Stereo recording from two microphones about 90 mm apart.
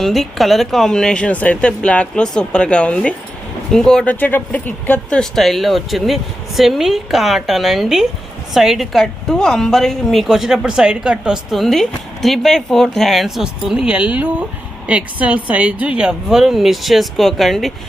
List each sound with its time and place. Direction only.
0.0 s speech: centre (ahead or behind); by 5.2 s 20° left (ahead or behind)
5.2 s a woman's voice: 5° left (ahead or behind)